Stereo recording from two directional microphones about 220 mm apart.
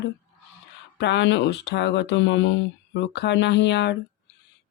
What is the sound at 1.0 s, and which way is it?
Speech, 55° left (ahead or behind).